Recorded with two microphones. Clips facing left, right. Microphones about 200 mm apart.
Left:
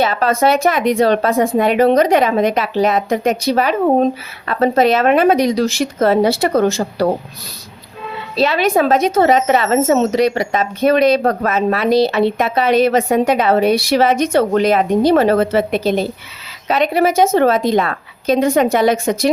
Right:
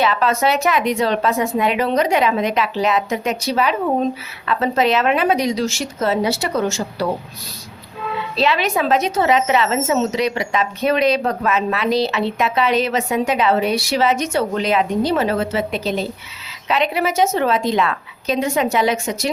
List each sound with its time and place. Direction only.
0.0 s speech: 45° left (ahead or behind)
8.4 s speech: 45° left (ahead or behind)